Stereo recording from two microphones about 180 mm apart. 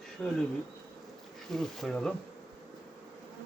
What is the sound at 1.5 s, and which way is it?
Speech, centre (ahead or behind).